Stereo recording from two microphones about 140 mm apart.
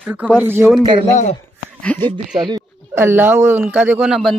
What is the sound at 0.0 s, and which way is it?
Speech, 10° right (ahead or behind).